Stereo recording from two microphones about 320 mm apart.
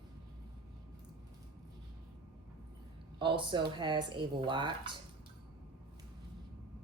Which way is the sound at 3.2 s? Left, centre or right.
Centre.